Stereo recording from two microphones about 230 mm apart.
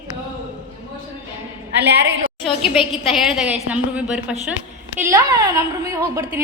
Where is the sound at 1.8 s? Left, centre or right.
Right.